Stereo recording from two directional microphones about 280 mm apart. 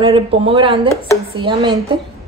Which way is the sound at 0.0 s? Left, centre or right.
Centre.